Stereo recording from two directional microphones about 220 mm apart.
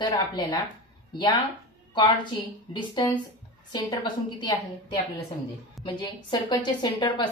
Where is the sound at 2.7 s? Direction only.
20° left (ahead or behind).